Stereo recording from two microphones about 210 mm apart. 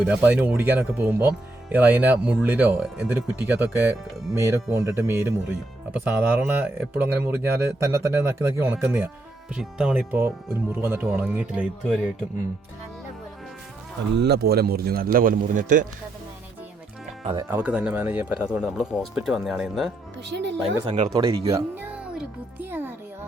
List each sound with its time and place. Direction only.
0.0 s speech: 5° right (ahead or behind)
14.2 s a man's voice: 50° right (ahead or behind)
17.5 s speech: 5° right (ahead or behind)
20.3 s a man's voice: 55° right (ahead or behind)
20.8 s speech: 25° right (ahead or behind); by 23.0 s 10° right (ahead or behind)